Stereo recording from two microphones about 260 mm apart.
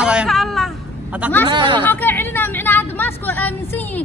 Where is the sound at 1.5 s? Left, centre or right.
Centre.